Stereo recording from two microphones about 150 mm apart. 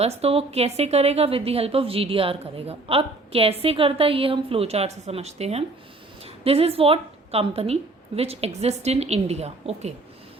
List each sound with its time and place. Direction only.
0.0 s a woman's voice: 45° right (ahead or behind)